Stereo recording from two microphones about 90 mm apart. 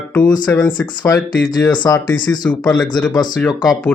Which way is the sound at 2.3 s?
15° left (ahead or behind).